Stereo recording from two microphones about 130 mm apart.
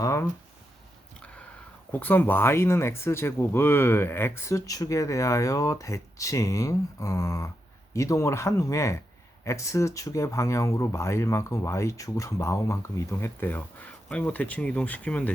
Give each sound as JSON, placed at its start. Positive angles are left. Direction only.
{"t": 0.0, "sound": "speech", "side_deg": 20}
{"t": 1.9, "sound": "speech", "side_deg": 15}